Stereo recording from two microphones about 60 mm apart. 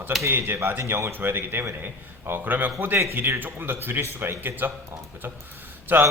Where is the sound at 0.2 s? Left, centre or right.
Right.